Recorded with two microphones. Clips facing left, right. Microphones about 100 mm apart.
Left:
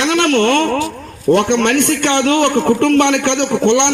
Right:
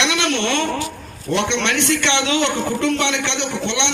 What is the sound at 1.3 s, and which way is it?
A man's voice, 50° left (ahead or behind).